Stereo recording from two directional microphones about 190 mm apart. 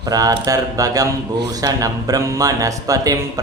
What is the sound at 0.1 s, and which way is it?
Speech, 20° right (ahead or behind).